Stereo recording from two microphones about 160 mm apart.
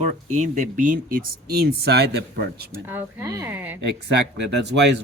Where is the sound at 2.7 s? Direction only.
15° right (ahead or behind).